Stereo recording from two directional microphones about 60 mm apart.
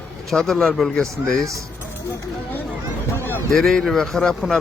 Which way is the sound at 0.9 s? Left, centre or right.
Centre.